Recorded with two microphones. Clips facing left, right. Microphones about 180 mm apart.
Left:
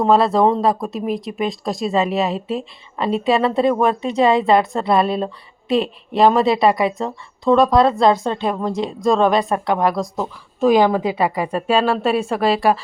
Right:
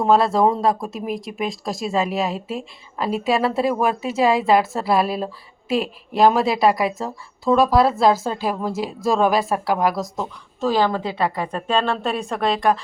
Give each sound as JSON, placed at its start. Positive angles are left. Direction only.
{"t": 0.0, "sound": "speech", "side_deg": 0}
{"t": 10.6, "sound": "a woman's voice", "side_deg": 15}